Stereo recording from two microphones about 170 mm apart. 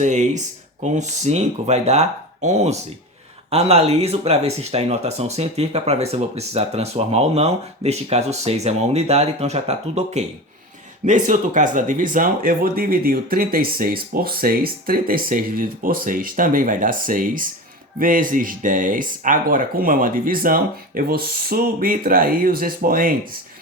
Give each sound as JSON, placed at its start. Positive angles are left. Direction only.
{"t": 0.0, "sound": "speech", "side_deg": -45}